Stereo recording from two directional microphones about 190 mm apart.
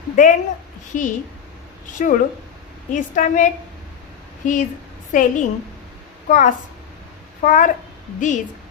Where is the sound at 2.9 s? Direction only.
40° left (ahead or behind).